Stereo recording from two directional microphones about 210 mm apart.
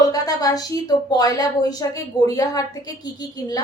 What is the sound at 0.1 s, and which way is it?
A woman's voice, 15° left (ahead or behind).